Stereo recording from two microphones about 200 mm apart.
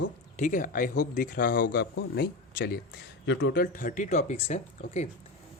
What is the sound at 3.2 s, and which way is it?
Speech, 65° left (ahead or behind).